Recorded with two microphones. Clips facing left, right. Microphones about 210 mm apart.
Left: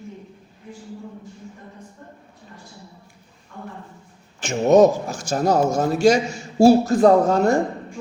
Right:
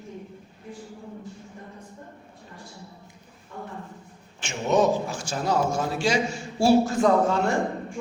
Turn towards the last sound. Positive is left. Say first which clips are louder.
# left 6 dB
turn(degrees=40)  # may be behind; listen again after turning